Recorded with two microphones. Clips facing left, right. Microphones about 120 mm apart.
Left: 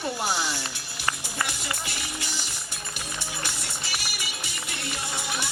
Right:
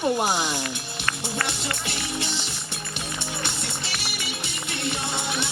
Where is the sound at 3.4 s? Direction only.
25° right (ahead or behind).